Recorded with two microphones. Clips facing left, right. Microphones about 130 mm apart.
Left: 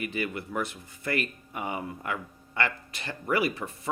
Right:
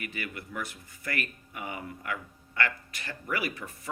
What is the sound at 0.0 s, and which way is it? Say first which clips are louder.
Speech: left 7 dB; 25° left (ahead or behind).